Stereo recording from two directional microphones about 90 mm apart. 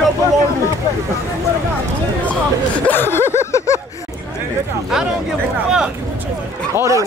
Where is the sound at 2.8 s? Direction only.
25° left (ahead or behind).